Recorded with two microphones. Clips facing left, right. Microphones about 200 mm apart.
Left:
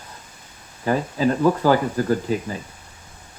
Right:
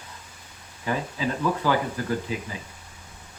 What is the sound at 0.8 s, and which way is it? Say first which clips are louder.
Speech: left 7 dB; 45° left (ahead or behind).